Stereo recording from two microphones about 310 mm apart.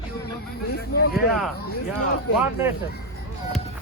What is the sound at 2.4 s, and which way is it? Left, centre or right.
Speech, centre.